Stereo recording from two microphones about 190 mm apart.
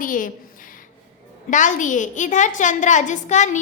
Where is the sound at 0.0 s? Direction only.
45° left (ahead or behind).